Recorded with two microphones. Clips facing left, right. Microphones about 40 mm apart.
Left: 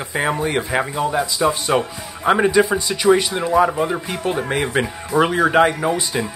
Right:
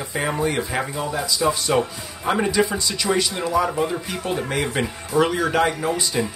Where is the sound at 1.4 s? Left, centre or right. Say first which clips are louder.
Left 1 dB; centre.